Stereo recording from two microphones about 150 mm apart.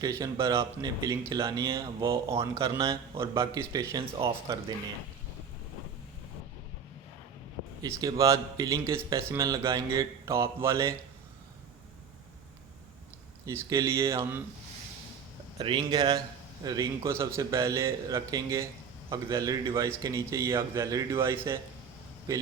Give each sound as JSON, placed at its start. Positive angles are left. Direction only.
{"t": 0.0, "sound": "speech", "side_deg": -20}
{"t": 3.9, "sound": "speech", "side_deg": -40}
{"t": 7.8, "sound": "speech", "side_deg": -25}
{"t": 13.4, "sound": "speech", "side_deg": -20}
{"t": 15.5, "sound": "speech", "side_deg": -35}